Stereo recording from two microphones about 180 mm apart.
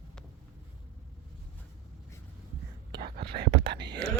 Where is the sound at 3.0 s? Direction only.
60° right (ahead or behind).